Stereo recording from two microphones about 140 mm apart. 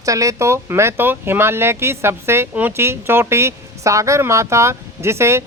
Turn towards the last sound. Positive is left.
turn(degrees=-20)  # may be behind; listen again after turning